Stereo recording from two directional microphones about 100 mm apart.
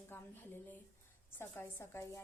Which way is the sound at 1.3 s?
20° left (ahead or behind).